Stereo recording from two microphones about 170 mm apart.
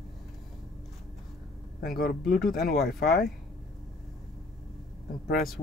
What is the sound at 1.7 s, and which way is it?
Speech, 60° left (ahead or behind).